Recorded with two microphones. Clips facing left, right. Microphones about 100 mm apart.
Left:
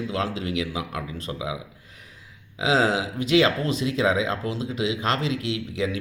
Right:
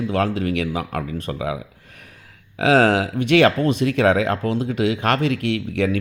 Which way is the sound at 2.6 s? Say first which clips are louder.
Right 6 dB; 60° right (ahead or behind).